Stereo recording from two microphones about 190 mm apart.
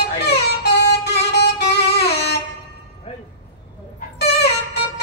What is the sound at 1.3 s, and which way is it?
Music, 60° left (ahead or behind).